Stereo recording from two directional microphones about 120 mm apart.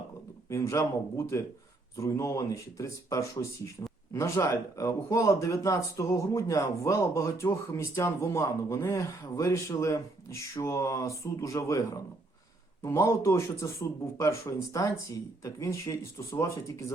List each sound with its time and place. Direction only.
0.5 s speech: 25° left (ahead or behind)